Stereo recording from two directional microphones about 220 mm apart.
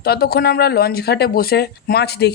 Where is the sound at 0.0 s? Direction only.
45° left (ahead or behind).